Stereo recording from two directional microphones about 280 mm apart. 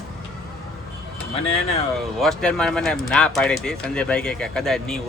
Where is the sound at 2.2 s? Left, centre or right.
Centre.